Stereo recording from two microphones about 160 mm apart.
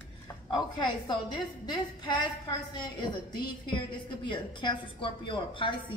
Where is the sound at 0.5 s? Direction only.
25° left (ahead or behind).